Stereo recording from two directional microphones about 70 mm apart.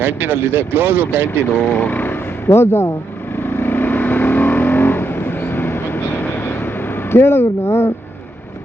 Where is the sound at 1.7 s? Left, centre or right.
Left.